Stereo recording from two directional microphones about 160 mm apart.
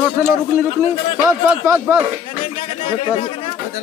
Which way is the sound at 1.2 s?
15° right (ahead or behind).